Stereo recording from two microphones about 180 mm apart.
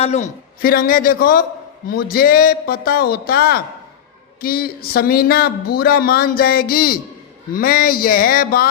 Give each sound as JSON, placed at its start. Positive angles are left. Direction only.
{"t": 0.0, "sound": "a man's voice", "side_deg": 35}
{"t": 0.6, "sound": "speech", "side_deg": 55}